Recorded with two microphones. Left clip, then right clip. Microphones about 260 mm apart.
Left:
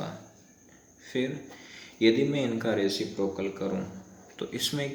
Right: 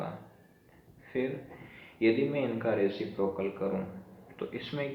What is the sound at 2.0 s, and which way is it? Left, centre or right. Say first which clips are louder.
Speech: left 3 dB; left.